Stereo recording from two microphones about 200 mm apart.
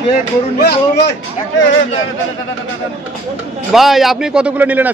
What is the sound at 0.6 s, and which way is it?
Speech, 55° left (ahead or behind).